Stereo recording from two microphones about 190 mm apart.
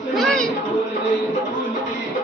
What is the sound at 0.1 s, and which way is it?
Chatter, centre (ahead or behind).